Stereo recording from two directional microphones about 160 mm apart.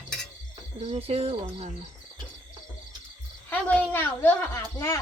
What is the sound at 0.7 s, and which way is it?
Speech, 45° right (ahead or behind).